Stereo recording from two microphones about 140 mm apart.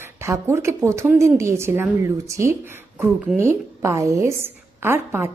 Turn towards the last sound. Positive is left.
turn(degrees=-15)  # may be behind; listen again after turning